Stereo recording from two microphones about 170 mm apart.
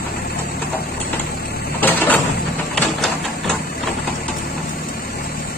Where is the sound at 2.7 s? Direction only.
5° left (ahead or behind).